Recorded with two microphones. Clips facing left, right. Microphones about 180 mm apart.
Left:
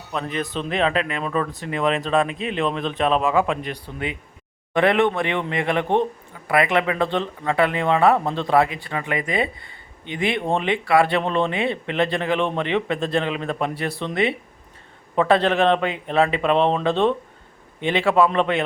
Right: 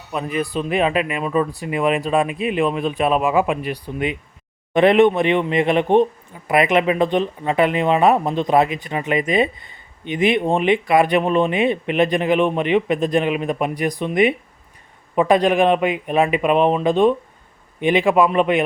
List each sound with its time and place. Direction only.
0.1 s speech: 10° right (ahead or behind)